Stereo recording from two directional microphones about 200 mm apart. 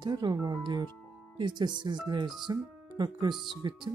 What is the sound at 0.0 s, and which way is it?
Speech, 20° right (ahead or behind).